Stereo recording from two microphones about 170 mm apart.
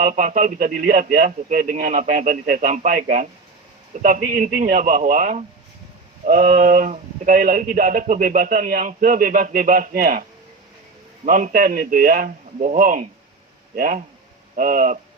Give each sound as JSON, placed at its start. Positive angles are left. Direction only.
{"t": 0.0, "sound": "speech", "side_deg": -50}
{"t": 11.3, "sound": "a man's voice", "side_deg": -50}